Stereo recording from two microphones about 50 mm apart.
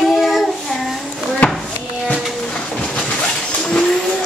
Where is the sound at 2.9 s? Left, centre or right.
Left.